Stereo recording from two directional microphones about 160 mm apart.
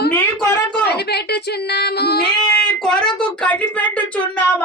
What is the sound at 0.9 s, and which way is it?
A woman's voice, 90° left.